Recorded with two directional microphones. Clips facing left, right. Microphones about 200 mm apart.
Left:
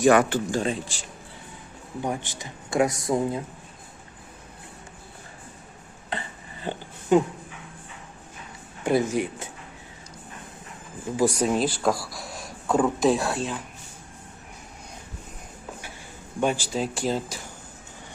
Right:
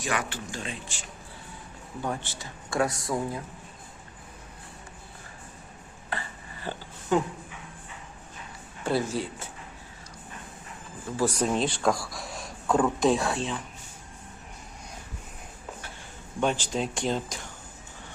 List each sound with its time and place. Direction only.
0.0 s speech: 50° left (ahead or behind)
2.0 s speech: 15° left (ahead or behind)
6.1 s a sound: 20° left (ahead or behind)
8.8 s speech: 15° left (ahead or behind)
11.2 s speech: 10° left (ahead or behind)
16.4 s speech: 10° left (ahead or behind)